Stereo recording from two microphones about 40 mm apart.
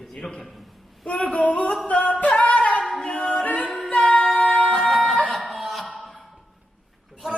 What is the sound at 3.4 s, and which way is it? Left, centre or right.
Music, left.